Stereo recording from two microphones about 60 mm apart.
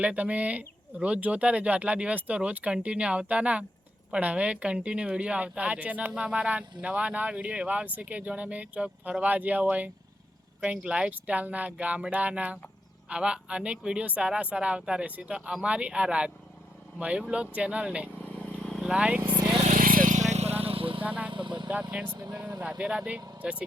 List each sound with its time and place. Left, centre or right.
0.0 s a woman's voice: right
15.4 s a man's voice: centre
15.6 s a man's voice: centre
18.2 s vehicle: centre
18.8 s a man's voice: centre
21.0 s vehicle: right
22.3 s speech: right
22.8 s a woman's voice: centre